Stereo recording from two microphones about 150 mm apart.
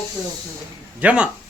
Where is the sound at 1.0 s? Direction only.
5° right (ahead or behind).